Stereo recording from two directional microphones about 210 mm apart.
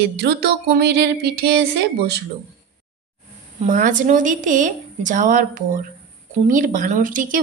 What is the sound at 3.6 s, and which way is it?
Speech, 35° right (ahead or behind).